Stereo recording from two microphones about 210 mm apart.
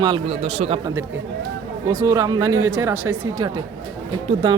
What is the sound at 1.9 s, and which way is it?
A man's voice, 15° right (ahead or behind).